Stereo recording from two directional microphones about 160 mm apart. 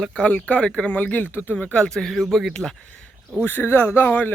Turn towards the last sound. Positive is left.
turn(degrees=10)  # may be behind; listen again after turning